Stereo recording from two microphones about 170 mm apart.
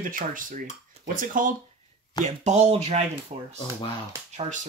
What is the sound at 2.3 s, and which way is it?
Speech, 40° right (ahead or behind).